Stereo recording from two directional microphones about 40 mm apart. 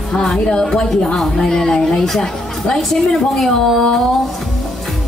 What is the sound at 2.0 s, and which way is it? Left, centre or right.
A woman's voice, centre.